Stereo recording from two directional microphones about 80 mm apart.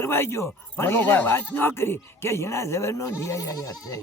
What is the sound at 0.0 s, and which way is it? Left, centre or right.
A man's voice, left.